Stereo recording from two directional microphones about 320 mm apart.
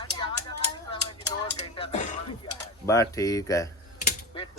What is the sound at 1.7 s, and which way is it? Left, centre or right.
Throat clearing, centre.